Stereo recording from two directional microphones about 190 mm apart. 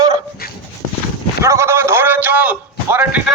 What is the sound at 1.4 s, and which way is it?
A man's voice, 15° right (ahead or behind).